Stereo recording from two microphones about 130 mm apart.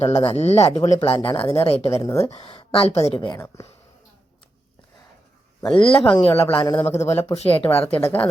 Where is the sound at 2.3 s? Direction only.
45° left (ahead or behind).